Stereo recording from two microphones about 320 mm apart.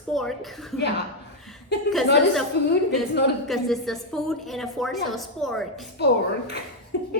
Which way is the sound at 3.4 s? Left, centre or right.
Centre.